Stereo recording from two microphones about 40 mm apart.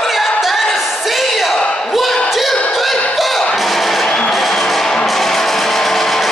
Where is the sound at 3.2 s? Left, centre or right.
Centre.